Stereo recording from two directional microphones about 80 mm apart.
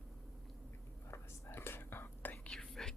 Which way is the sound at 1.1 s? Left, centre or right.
Left.